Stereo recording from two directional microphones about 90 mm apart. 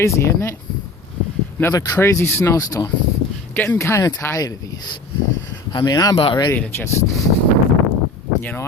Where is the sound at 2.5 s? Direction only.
40° left (ahead or behind).